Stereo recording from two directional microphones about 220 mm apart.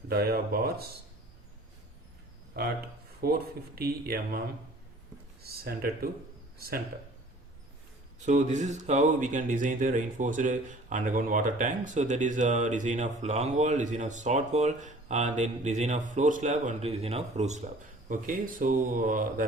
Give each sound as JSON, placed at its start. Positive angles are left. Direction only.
{"t": 0.1, "sound": "speech", "side_deg": -45}
{"t": 3.2, "sound": "speech", "side_deg": -45}
{"t": 8.2, "sound": "speech", "side_deg": -30}